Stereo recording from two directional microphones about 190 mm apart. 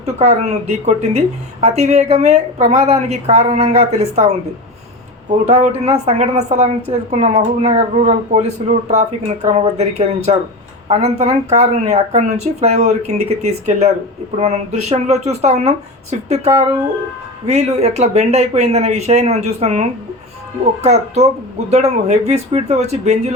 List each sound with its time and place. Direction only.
0.0 s a woman's voice: 35° right (ahead or behind)
5.5 s a woman's voice: 35° right (ahead or behind)
20.8 s a woman's voice: 35° right (ahead or behind)